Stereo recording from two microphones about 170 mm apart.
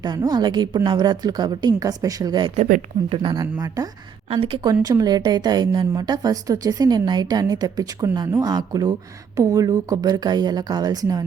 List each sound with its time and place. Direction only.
0.0 s speech: 25° right (ahead or behind)
2.6 s speech: 50° right (ahead or behind)
3.1 s speech: 30° right (ahead or behind)
4.3 s speech: 30° right (ahead or behind)